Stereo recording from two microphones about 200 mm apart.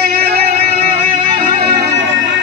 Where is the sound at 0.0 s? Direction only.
55° right (ahead or behind).